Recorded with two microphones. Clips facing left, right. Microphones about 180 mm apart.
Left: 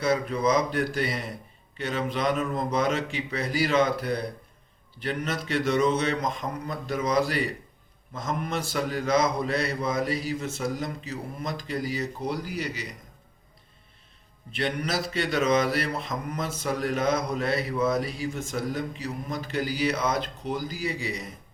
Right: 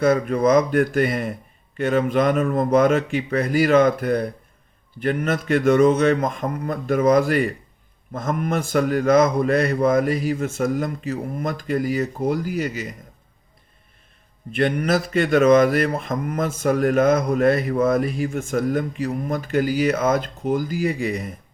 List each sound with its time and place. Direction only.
0.0 s speech: 50° right (ahead or behind)
14.5 s speech: 50° right (ahead or behind)